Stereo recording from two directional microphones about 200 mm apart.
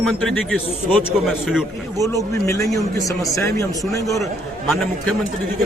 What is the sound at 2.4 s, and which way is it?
Speech, 15° left (ahead or behind).